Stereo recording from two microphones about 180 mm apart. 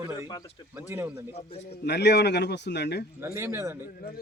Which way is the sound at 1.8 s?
70° left (ahead or behind).